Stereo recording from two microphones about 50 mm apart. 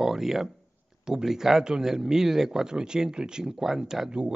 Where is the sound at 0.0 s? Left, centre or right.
Centre.